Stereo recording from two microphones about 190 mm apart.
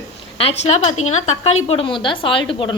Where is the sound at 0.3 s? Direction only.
30° left (ahead or behind).